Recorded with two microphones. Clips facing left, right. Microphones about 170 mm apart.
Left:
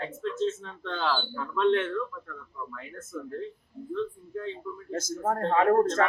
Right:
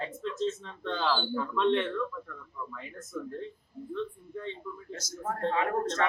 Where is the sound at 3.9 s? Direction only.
5° left (ahead or behind).